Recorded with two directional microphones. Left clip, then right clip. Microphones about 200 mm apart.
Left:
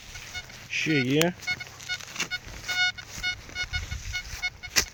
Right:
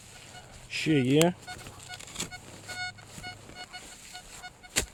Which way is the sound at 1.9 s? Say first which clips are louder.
Left 9 dB; 40° left (ahead or behind).